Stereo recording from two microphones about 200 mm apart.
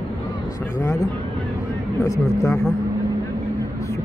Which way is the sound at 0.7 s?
15° left (ahead or behind).